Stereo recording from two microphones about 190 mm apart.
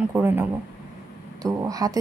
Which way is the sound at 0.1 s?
10° right (ahead or behind).